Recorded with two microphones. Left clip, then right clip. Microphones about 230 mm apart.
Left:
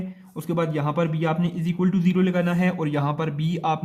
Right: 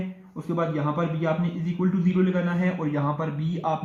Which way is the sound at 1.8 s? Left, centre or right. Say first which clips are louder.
Left 2 dB; left.